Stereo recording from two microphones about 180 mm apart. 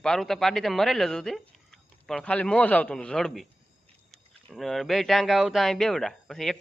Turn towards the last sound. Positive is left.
turn(degrees=0)  # may be behind; listen again after turning